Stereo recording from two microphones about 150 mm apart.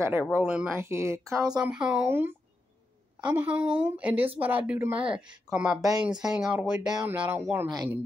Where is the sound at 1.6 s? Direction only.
5° right (ahead or behind).